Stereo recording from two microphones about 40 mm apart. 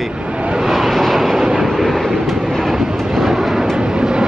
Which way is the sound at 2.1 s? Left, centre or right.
Centre.